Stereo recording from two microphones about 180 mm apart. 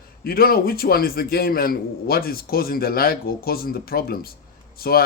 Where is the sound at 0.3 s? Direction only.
55° left (ahead or behind).